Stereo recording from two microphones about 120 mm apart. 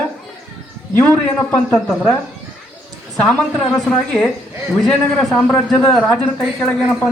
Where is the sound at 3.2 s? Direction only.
10° left (ahead or behind).